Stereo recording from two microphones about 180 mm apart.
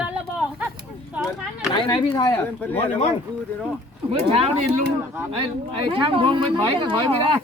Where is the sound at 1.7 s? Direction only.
25° left (ahead or behind).